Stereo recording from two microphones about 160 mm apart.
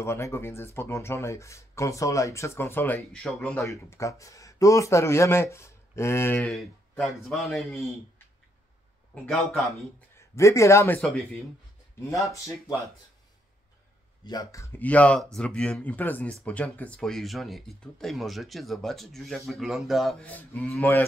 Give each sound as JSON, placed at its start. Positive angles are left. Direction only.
{"t": 0.0, "sound": "speech", "side_deg": 15}
{"t": 6.5, "sound": "speech", "side_deg": 0}
{"t": 9.1, "sound": "speech", "side_deg": 10}
{"t": 10.1, "sound": "speech", "side_deg": 20}
{"t": 11.0, "sound": "speech", "side_deg": 0}
{"t": 12.3, "sound": "speech", "side_deg": 20}
{"t": 14.2, "sound": "speech", "side_deg": 25}